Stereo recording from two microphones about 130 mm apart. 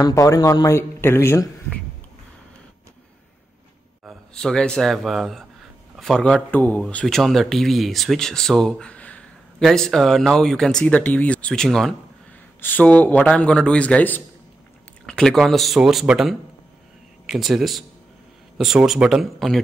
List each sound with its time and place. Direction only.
0.0 s speech: 25° left (ahead or behind)
4.3 s a man's voice: 5° left (ahead or behind)